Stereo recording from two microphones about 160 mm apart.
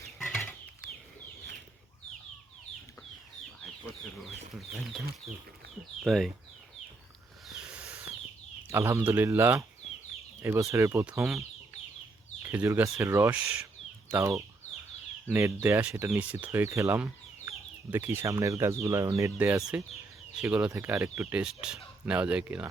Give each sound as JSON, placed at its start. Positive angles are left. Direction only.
{"t": 0.2, "sound": "chicken", "side_deg": 0}
{"t": 0.8, "sound": "chicken", "side_deg": -90}
{"t": 5.3, "sound": "speech", "side_deg": 0}
{"t": 7.4, "sound": "a sound", "side_deg": -5}
{"t": 8.7, "sound": "speech", "side_deg": -15}
{"t": 12.4, "sound": "speech", "side_deg": -15}
{"t": 21.3, "sound": "speech", "side_deg": -5}